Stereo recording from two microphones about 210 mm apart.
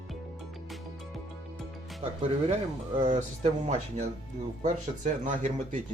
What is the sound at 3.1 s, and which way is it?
Speech, 35° right (ahead or behind).